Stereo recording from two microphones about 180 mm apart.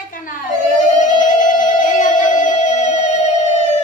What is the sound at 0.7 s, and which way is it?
Music, 45° left (ahead or behind).